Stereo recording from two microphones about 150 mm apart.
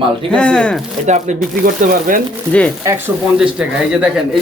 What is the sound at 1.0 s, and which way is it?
Speech, 50° right (ahead or behind).